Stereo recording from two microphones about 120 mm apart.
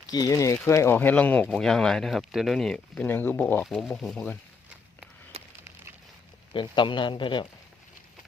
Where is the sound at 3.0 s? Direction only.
15° left (ahead or behind).